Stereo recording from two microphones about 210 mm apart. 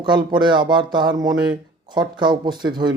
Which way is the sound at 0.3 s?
20° right (ahead or behind).